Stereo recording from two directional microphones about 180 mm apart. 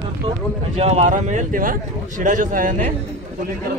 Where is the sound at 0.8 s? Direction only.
35° right (ahead or behind).